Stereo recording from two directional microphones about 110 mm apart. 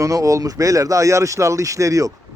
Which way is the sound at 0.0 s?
30° right (ahead or behind).